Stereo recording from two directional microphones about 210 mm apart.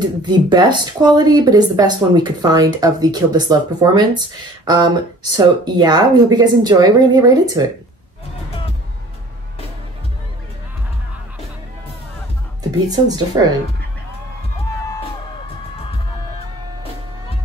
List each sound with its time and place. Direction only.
0.2 s speech: 20° right (ahead or behind)
12.8 s speech: 20° right (ahead or behind)